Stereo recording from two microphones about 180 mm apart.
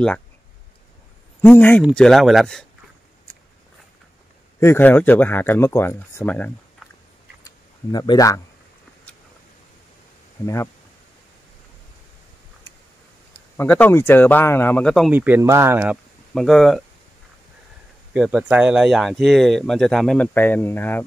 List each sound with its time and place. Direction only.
1.4 s speech: 10° left (ahead or behind)
4.6 s speech: 10° left (ahead or behind)
7.4 s a sound: 20° left (ahead or behind)
10.4 s speech: 15° left (ahead or behind)
13.6 s speech: 10° left (ahead or behind)
15.0 s speech: 10° right (ahead or behind)
16.3 s speech: centre (ahead or behind)
18.1 s speech: 5° right (ahead or behind); by 21.0 s 10° left (ahead or behind)